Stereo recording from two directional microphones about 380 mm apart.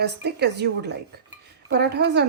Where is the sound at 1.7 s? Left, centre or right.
Right.